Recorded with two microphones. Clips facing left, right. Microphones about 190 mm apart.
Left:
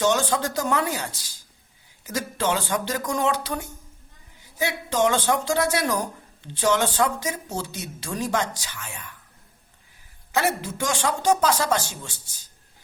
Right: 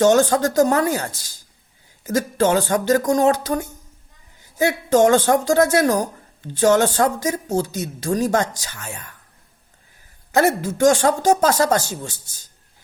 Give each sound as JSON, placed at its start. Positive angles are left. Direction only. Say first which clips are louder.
{"t": 0.0, "sound": "speech", "louder": "right 8 dB", "side_deg": -45}
{"t": 10.3, "sound": "speech", "louder": "right 7 dB", "side_deg": -45}